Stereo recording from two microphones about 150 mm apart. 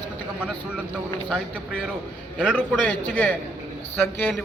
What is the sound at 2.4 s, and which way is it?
A man's voice, 5° left (ahead or behind).